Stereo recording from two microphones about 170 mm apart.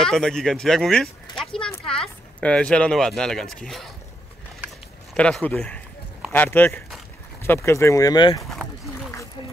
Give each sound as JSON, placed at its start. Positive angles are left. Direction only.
{"t": 0.0, "sound": "speech", "side_deg": 5}
{"t": 5.1, "sound": "speech", "side_deg": 5}
{"t": 8.5, "sound": "a sound", "side_deg": 0}